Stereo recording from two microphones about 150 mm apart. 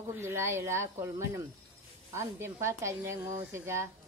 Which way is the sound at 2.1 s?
20° right (ahead or behind).